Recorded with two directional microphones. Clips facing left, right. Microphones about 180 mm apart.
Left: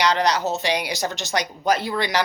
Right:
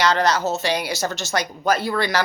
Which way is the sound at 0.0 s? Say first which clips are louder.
Right 1 dB; 15° left (ahead or behind).